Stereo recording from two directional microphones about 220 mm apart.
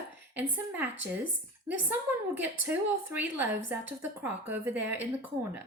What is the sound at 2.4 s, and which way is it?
A woman's voice, 10° right (ahead or behind).